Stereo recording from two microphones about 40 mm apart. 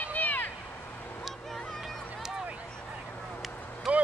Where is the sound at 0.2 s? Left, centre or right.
Left.